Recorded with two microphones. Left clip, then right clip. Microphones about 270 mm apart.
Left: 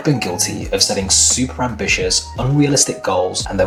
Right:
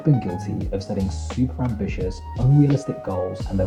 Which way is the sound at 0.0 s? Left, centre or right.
Centre.